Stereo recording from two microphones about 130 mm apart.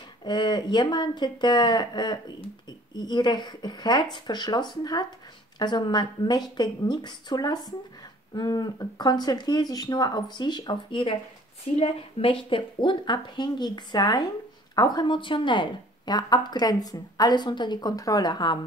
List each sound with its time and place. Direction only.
0.2 s a woman's voice: 35° left (ahead or behind)